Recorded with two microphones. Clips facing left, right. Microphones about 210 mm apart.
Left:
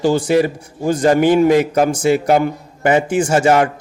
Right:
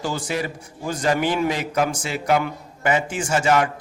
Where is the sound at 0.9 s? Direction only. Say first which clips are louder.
Left 9 dB; 40° left (ahead or behind).